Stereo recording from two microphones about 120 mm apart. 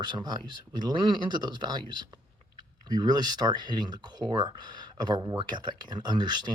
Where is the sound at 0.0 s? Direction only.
40° right (ahead or behind).